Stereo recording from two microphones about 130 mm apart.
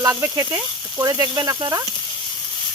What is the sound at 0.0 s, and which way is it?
Speech, 25° right (ahead or behind).